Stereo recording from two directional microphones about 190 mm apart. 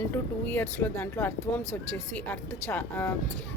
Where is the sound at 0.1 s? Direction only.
10° left (ahead or behind).